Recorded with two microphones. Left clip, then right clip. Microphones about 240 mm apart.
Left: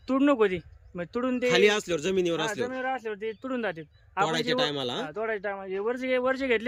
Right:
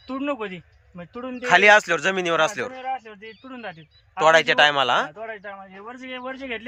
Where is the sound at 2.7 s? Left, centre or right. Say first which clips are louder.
Right 1 dB; centre.